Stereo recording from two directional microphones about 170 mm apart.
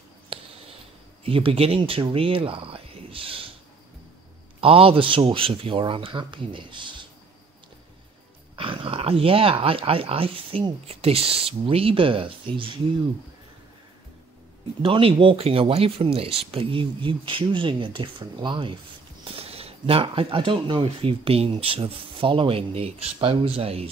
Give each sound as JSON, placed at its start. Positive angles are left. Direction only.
{"t": 0.3, "sound": "a sound", "side_deg": -30}
{"t": 1.2, "sound": "speech", "side_deg": -35}
{"t": 4.6, "sound": "speech", "side_deg": -35}
{"t": 8.5, "sound": "speech", "side_deg": -30}
{"t": 14.8, "sound": "speech", "side_deg": -30}